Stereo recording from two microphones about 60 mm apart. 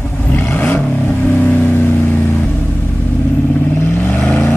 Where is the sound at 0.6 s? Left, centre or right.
Left.